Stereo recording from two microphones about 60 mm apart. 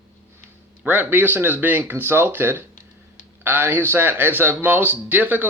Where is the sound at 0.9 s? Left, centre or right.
Right.